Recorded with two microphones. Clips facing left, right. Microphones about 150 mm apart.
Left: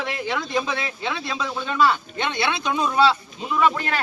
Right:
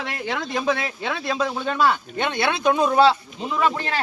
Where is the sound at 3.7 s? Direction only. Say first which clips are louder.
Even; 30° right (ahead or behind).